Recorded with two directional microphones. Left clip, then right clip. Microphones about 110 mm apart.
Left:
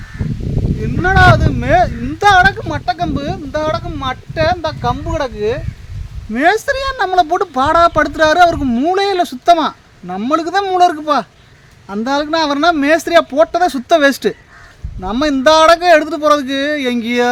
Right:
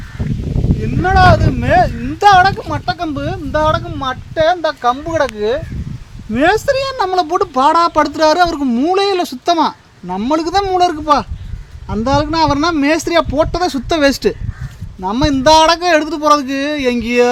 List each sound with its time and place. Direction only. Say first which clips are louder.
1.0 s speech: even; centre (ahead or behind)
4.4 s speech: right 3 dB; 30° right (ahead or behind)
6.3 s a woman's voice: right 1 dB; 15° right (ahead or behind); by 17.2 s 10° left (ahead or behind)